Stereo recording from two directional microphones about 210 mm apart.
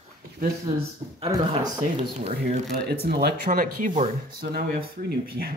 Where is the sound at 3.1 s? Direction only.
50° right (ahead or behind).